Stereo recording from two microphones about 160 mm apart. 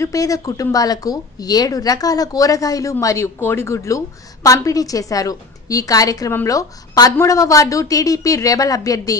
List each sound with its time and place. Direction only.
0.0 s speech: 20° left (ahead or behind)